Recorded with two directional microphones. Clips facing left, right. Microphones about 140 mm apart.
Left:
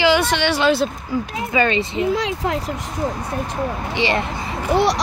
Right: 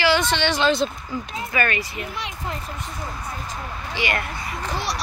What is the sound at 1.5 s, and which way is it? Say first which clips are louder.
Speech: left 6 dB; 20° left (ahead or behind).